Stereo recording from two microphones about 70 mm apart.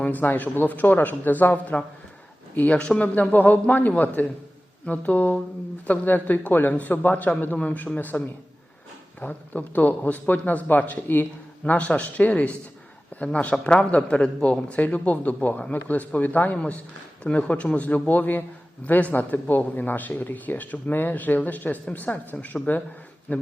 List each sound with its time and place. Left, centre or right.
0.0 s speech: left
9.2 s speech: left
17.2 s speech: centre